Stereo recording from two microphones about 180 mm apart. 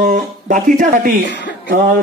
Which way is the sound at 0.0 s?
45° right (ahead or behind).